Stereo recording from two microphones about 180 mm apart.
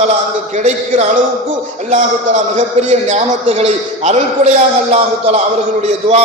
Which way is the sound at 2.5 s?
40° right (ahead or behind).